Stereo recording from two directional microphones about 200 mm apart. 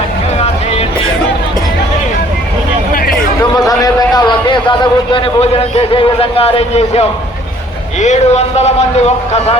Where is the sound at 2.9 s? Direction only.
45° left (ahead or behind).